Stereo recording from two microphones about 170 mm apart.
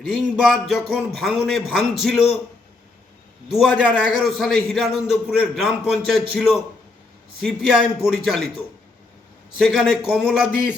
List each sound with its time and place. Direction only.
0.1 s a man's voice: 5° right (ahead or behind)
3.5 s a man's voice: 5° right (ahead or behind)
9.6 s a man's voice: centre (ahead or behind)